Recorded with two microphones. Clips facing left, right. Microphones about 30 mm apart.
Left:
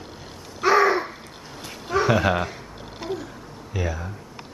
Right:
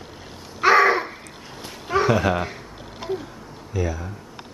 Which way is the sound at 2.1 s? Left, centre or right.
Centre.